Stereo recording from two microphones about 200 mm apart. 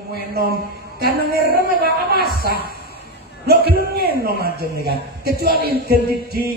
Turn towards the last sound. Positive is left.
turn(degrees=-50)  # may be behind; listen again after turning